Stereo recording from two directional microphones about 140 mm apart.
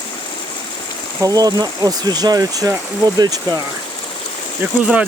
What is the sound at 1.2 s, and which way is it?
Speech, 25° right (ahead or behind).